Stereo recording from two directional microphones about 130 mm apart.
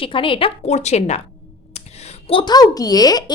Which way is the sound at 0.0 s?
40° left (ahead or behind).